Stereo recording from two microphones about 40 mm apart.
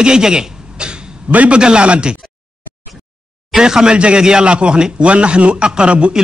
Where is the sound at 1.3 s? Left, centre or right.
Right.